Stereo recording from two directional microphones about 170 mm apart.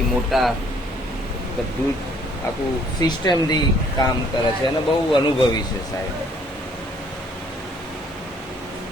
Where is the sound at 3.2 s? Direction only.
25° left (ahead or behind).